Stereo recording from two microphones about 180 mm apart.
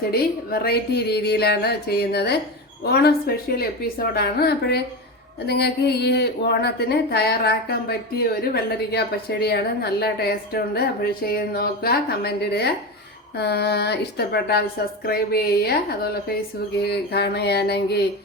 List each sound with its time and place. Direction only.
0.1 s a woman's voice: 60° left (ahead or behind)